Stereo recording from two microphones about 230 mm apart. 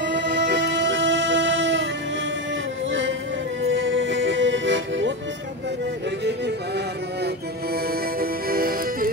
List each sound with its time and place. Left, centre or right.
0.0 s music: right
2.9 s music: right
7.7 s accordion: right